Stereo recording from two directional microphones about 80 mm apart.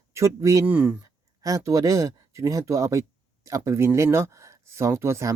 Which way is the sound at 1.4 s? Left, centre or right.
Right.